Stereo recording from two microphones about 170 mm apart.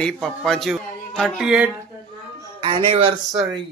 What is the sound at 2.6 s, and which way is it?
Speech, 30° right (ahead or behind).